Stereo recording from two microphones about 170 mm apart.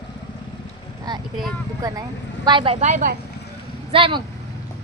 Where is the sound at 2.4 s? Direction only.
30° right (ahead or behind); by 3.1 s 45° right (ahead or behind).